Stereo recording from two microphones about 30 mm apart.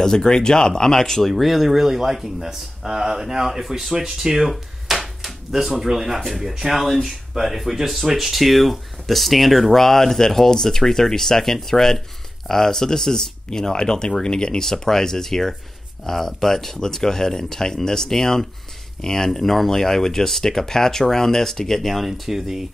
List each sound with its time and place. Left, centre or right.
0.0 s speech: left
1.2 s speech: centre
4.5 s a sound: centre
5.5 s speech: centre; by 14.6 s left
14.6 s speech: centre
21.8 s speech: centre